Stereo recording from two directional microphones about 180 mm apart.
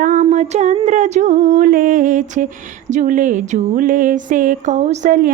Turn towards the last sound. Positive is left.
turn(degrees=-45)  # may be behind; listen again after turning